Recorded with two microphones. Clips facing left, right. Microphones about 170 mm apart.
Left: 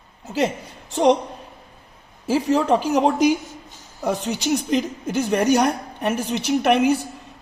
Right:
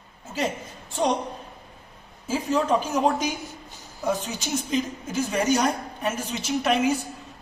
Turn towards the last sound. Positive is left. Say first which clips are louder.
# left 5 dB
turn(degrees=70)  # may be behind; listen again after turning